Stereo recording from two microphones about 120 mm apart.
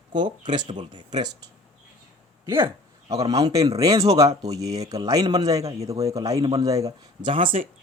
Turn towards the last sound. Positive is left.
turn(degrees=-50)  # may be behind; listen again after turning